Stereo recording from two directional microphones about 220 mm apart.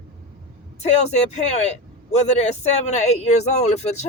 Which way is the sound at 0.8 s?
30° left (ahead or behind).